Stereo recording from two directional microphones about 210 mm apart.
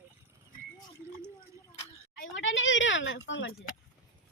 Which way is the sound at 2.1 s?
60° left (ahead or behind).